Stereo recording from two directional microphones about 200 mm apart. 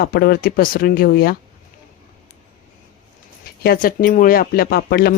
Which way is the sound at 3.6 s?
45° left (ahead or behind).